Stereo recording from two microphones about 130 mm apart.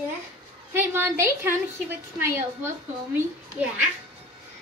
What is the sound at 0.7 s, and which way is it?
A woman's voice, 15° right (ahead or behind).